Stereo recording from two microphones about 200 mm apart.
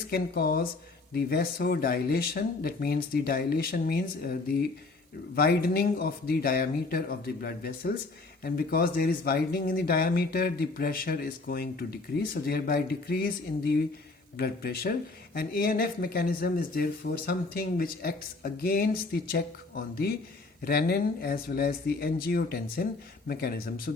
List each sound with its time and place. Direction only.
0.1 s speech: 50° left (ahead or behind)